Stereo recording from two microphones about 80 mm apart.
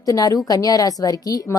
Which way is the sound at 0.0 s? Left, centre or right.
Left.